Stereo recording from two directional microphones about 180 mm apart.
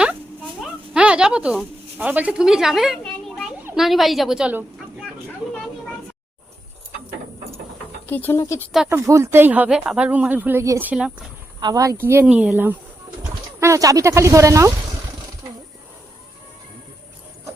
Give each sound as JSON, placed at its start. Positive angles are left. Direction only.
{"t": 0.6, "sound": "a sound", "side_deg": -5}
{"t": 3.8, "sound": "a woman's voice", "side_deg": 0}
{"t": 8.0, "sound": "speech", "side_deg": 10}
{"t": 8.9, "sound": "speech", "side_deg": -15}
{"t": 11.6, "sound": "speech", "side_deg": -20}